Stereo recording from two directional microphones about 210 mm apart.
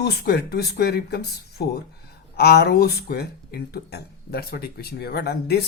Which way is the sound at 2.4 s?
50° left (ahead or behind).